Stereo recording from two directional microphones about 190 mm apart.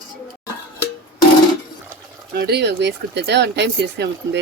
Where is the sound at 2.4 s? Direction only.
60° right (ahead or behind).